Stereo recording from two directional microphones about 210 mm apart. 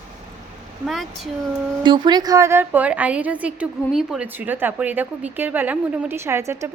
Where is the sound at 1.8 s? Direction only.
20° right (ahead or behind).